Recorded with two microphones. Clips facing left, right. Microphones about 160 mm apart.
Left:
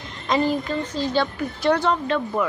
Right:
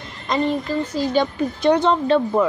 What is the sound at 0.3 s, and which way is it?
Speech, centre (ahead or behind).